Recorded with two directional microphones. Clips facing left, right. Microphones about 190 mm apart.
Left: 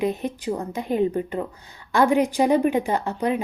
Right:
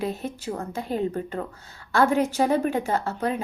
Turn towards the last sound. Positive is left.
turn(degrees=15)  # may be behind; listen again after turning